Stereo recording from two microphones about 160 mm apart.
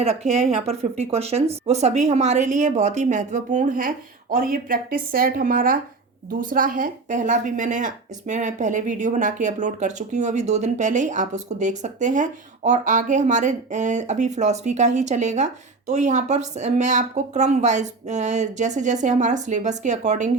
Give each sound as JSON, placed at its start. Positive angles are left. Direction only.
{"t": 0.0, "sound": "a woman's voice", "side_deg": -40}